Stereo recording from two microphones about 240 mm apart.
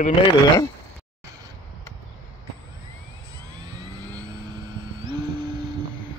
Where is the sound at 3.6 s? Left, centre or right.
Centre.